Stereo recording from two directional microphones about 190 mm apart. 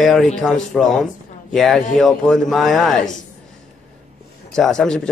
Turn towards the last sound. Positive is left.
turn(degrees=5)  # may be behind; listen again after turning